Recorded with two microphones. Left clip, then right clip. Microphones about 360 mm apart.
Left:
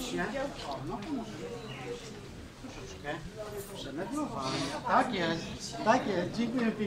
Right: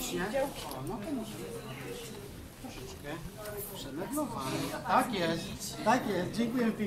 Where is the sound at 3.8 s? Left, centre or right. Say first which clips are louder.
Even; centre.